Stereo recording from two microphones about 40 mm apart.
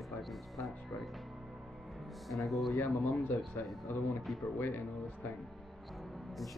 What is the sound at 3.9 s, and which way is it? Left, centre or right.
Speech, left.